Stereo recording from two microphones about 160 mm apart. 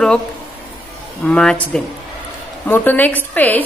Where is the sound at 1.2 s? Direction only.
5° left (ahead or behind).